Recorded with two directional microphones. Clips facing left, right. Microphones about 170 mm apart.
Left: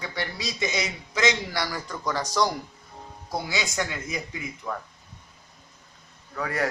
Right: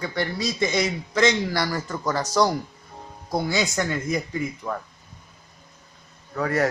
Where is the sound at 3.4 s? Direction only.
50° right (ahead or behind).